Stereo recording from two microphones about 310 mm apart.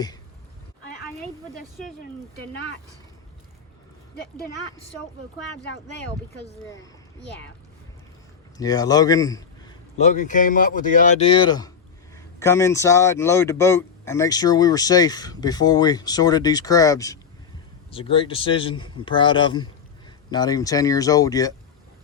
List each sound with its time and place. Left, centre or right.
8.5 s a man's voice: centre
10.0 s a man's voice: left